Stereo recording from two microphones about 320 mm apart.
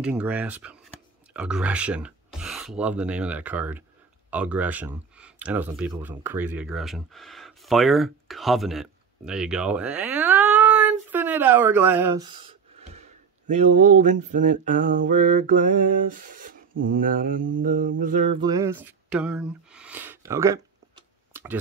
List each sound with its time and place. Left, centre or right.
0.0 s speech: centre; by 14.1 s right
14.3 s mantra: right; by 21.5 s centre